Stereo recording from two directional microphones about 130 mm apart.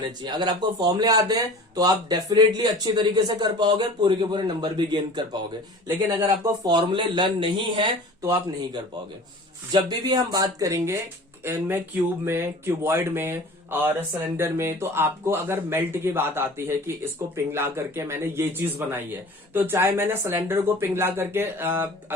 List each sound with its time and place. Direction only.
0.2 s speech: 35° right (ahead or behind)
6.7 s speech: 35° right (ahead or behind)
8.2 s speech: 25° right (ahead or behind)